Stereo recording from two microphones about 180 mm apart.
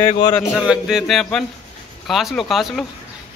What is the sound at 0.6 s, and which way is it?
Speech, 5° right (ahead or behind).